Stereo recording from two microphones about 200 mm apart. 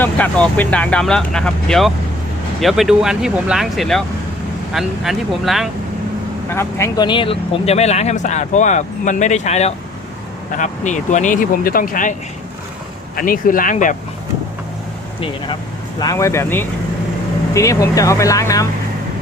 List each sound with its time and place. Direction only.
0.0 s speech: 10° left (ahead or behind)
6.5 s speech: 15° left (ahead or behind); by 12.1 s 45° left (ahead or behind)
13.1 s speech: 45° left (ahead or behind)
16.0 s speech: 15° left (ahead or behind)